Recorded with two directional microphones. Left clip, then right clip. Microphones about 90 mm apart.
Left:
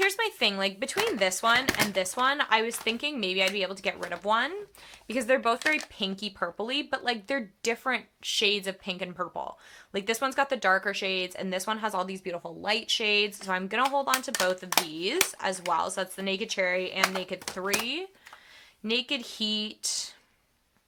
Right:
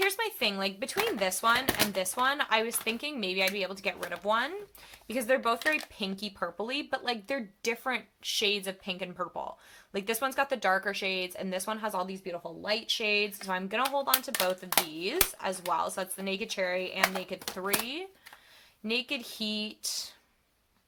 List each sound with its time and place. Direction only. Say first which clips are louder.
0.0 s a sound: left 3 dB; 50° left (ahead or behind)
1.0 s speech: left 2 dB; 40° left (ahead or behind)
5.0 s speech: left 3 dB; 55° left (ahead or behind)
6.0 s speech: left 3 dB; 45° left (ahead or behind)
12.0 s speech: left 3 dB; 90° left
13.1 s speech: left 3 dB; 50° left (ahead or behind)